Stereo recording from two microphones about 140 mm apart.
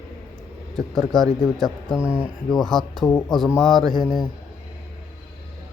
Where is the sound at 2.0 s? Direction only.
10° right (ahead or behind).